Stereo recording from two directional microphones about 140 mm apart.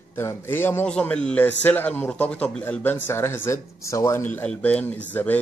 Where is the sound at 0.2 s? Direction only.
15° left (ahead or behind).